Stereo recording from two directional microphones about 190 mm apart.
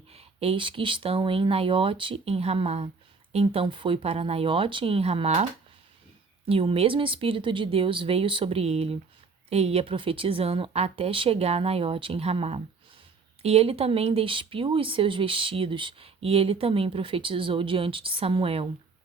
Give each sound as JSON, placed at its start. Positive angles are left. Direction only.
{"t": 0.1, "sound": "a woman's voice", "side_deg": -30}